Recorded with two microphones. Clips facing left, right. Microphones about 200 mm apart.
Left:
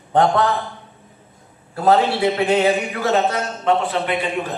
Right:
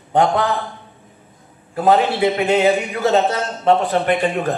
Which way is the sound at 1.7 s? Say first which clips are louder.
Right 1 dB; 20° right (ahead or behind).